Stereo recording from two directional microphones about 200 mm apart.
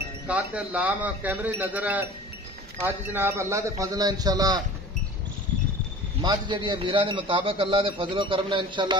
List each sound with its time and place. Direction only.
0.3 s speech: 5° right (ahead or behind)
6.2 s a man's voice: 25° right (ahead or behind)